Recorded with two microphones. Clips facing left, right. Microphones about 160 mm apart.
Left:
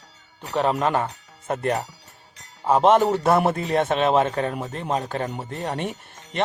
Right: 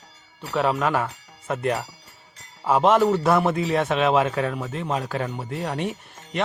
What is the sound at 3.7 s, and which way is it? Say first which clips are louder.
Speech: left 1 dB; 40° left (ahead or behind).